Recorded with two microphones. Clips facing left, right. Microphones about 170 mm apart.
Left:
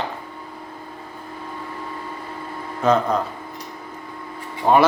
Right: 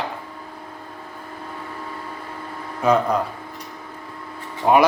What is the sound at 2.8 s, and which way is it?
Speech, 10° right (ahead or behind).